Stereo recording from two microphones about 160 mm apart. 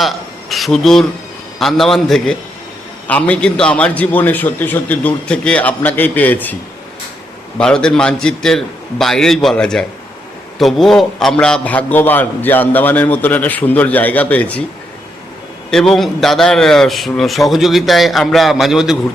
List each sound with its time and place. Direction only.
0.0 s a sound: centre (ahead or behind)
1.5 s a man's voice: centre (ahead or behind)
7.6 s a man's voice: 5° left (ahead or behind)
15.7 s a man's voice: 5° left (ahead or behind)